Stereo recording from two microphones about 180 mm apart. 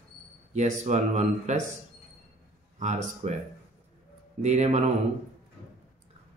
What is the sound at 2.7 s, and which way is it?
Speech, 40° right (ahead or behind).